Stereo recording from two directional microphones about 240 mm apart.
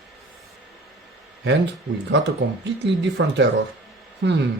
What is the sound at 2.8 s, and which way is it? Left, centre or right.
Speech, right.